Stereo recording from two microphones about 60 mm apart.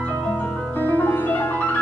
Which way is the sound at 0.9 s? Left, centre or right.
Left.